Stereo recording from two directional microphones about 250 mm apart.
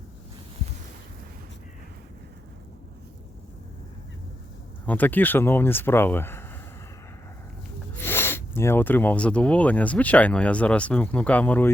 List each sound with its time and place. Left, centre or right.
4.9 s speech: centre
7.9 s speech: centre